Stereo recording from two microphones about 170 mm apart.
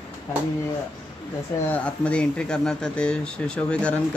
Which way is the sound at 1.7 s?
5° left (ahead or behind).